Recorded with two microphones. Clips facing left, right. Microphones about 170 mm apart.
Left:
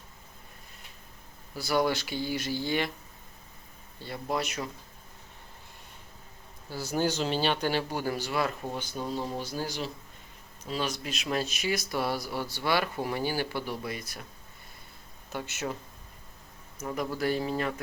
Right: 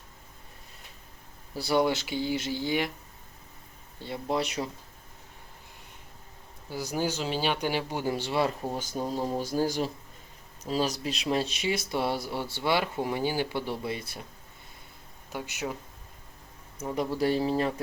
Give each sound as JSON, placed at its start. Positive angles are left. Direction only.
{"t": 1.5, "sound": "speech", "side_deg": -30}
{"t": 4.0, "sound": "a man's voice", "side_deg": -25}
{"t": 6.7, "sound": "speech", "side_deg": -15}
{"t": 15.3, "sound": "speech", "side_deg": -10}
{"t": 16.7, "sound": "speech", "side_deg": -25}